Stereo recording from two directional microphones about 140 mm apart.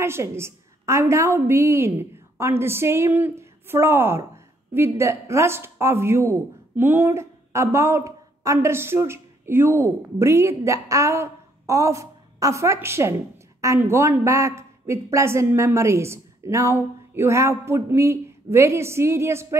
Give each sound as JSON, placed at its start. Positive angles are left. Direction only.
{"t": 0.0, "sound": "a woman's voice", "side_deg": -20}